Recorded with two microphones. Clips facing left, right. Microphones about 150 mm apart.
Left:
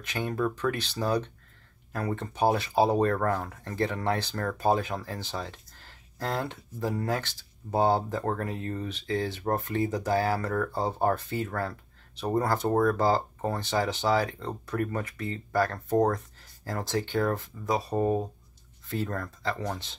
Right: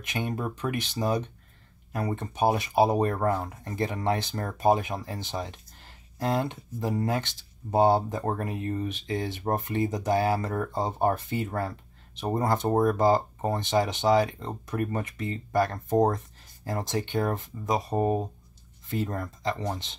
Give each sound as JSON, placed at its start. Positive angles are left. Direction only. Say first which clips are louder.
{"t": 0.0, "sound": "speech", "louder": "left 2 dB", "side_deg": -20}